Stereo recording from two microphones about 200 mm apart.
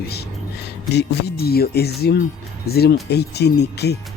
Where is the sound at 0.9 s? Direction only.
50° left (ahead or behind).